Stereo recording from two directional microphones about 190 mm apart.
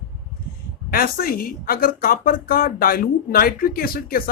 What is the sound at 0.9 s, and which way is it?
A woman's voice, 50° left (ahead or behind).